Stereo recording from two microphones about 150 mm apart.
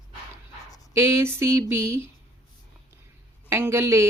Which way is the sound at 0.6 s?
25° left (ahead or behind).